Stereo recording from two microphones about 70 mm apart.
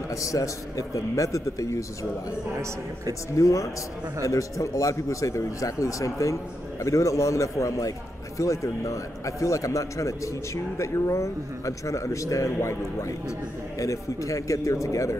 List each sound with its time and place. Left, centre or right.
0.1 s a man's voice: left
3.3 s a man's voice: left